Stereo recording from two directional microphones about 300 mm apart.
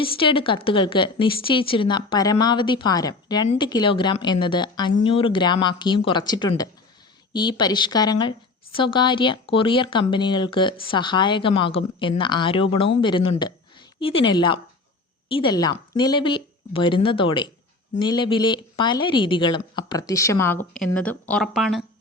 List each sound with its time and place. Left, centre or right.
0.0 s speech: centre